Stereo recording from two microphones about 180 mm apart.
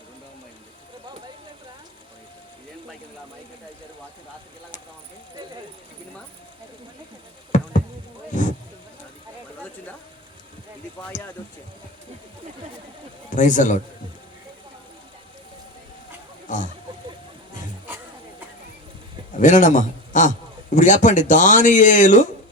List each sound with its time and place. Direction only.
7.5 s a sound: 45° left (ahead or behind)
8.3 s speech: 45° left (ahead or behind)
11.1 s speech: 45° left (ahead or behind)
13.3 s speech: 45° left (ahead or behind)
16.5 s speech: 45° left (ahead or behind)
17.8 s music: 10° right (ahead or behind)
19.4 s a man's voice: 45° left (ahead or behind)